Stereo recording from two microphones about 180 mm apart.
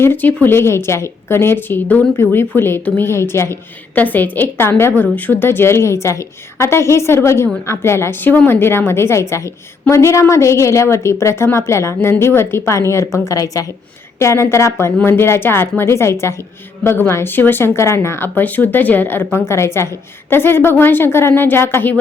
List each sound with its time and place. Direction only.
0.0 s a woman's voice: 10° left (ahead or behind)